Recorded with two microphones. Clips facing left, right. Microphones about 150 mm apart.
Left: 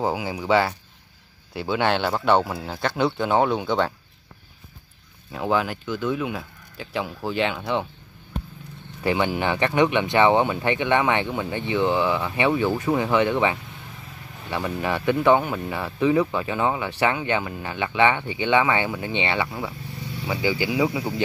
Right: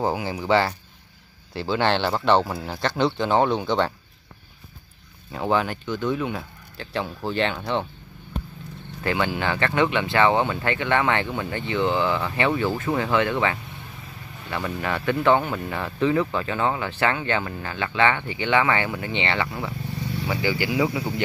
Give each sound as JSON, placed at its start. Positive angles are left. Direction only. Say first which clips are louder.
{"t": 0.0, "sound": "speech", "louder": "even", "side_deg": 10}
{"t": 5.3, "sound": "speech", "louder": "even", "side_deg": 0}
{"t": 9.0, "sound": "speech", "louder": "left 2 dB", "side_deg": 15}